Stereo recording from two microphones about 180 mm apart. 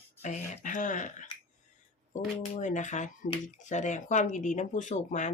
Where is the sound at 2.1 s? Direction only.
45° left (ahead or behind).